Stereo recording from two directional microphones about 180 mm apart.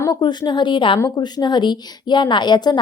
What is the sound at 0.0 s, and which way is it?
A woman's voice, 25° left (ahead or behind).